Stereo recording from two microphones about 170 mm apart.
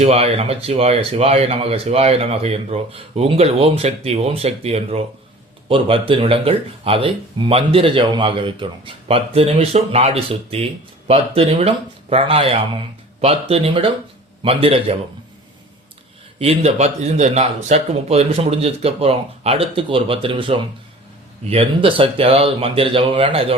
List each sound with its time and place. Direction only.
0.0 s speech: 35° right (ahead or behind)
16.4 s speech: 40° right (ahead or behind)